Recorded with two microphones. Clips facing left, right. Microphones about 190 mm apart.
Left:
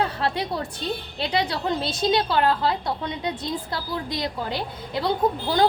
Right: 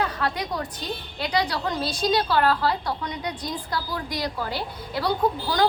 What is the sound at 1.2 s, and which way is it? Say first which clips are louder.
A woman's voice: even; 25° left (ahead or behind).